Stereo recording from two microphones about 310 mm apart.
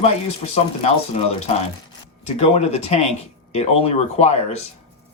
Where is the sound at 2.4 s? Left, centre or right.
Centre.